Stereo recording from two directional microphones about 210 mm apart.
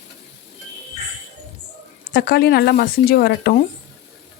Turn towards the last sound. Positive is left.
turn(degrees=50)  # may be behind; listen again after turning